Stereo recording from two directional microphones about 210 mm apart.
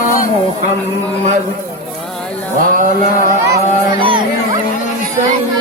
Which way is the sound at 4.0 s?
25° right (ahead or behind).